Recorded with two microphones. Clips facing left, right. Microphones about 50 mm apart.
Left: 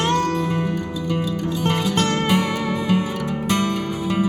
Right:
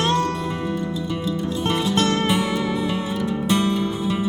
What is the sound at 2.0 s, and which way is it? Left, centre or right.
Music, left.